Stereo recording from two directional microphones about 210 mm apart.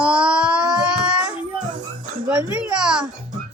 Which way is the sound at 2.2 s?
5° right (ahead or behind).